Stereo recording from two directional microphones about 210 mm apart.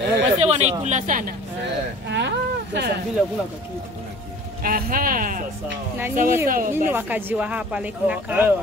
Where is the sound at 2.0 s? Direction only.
55° right (ahead or behind).